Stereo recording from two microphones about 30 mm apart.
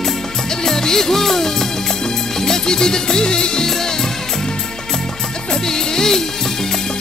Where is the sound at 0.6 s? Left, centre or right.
Centre.